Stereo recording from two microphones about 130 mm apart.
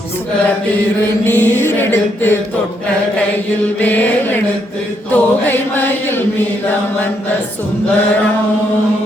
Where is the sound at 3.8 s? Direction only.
15° left (ahead or behind).